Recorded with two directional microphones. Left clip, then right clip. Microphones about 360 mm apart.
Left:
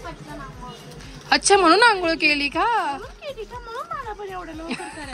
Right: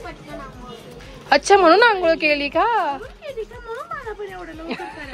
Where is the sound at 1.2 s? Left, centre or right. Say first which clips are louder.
Right 3 dB; centre.